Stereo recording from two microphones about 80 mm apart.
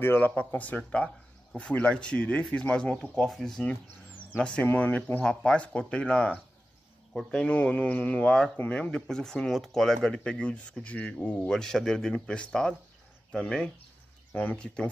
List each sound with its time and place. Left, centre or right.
0.0 s speech: left
0.3 s speech: centre
4.4 s speech: centre
11.4 s speech: centre